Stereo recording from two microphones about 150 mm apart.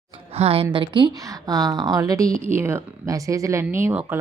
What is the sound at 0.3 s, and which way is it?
Speech, 40° right (ahead or behind).